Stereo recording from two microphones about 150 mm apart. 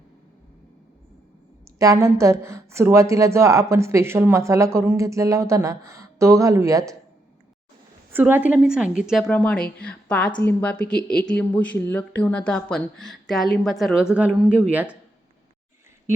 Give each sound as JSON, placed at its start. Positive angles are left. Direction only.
{"t": 1.8, "sound": "speech", "side_deg": -20}
{"t": 8.1, "sound": "a woman's voice", "side_deg": -10}
{"t": 9.3, "sound": "a woman's voice", "side_deg": 10}